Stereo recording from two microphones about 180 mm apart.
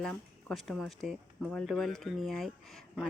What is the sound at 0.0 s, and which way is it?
Speech, 5° left (ahead or behind).